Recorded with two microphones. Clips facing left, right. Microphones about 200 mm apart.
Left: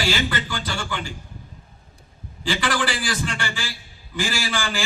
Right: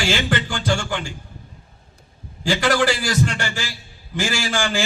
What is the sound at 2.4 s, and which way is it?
A man's voice, 45° right (ahead or behind).